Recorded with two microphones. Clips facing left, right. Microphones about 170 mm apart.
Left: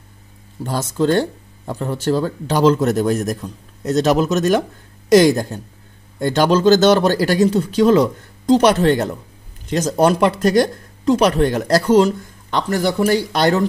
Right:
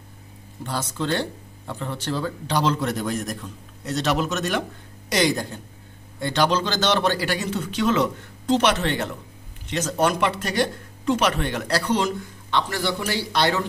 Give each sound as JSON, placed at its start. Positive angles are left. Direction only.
{"t": 0.7, "sound": "speech", "side_deg": 45}